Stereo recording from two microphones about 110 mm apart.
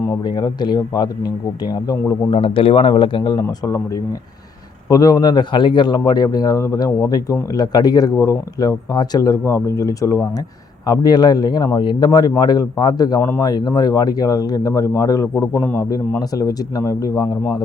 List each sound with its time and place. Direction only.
0.3 s speech: 40° left (ahead or behind)
2.3 s speech: 55° left (ahead or behind)
3.3 s speech: 25° left (ahead or behind)